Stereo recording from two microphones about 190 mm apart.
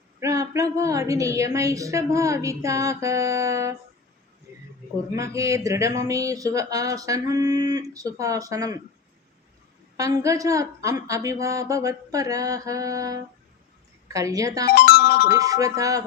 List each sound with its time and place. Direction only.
0.2 s a woman's voice: 15° right (ahead or behind)
5.1 s a woman's voice: 15° right (ahead or behind)
10.0 s a woman's voice: 15° right (ahead or behind)
14.7 s music: 55° left (ahead or behind)
15.4 s a woman's voice: 20° right (ahead or behind)